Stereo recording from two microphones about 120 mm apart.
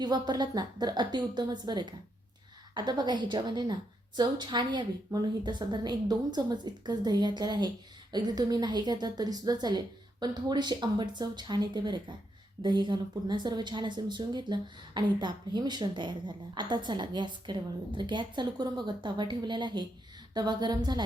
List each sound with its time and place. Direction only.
0.0 s speech: 35° right (ahead or behind)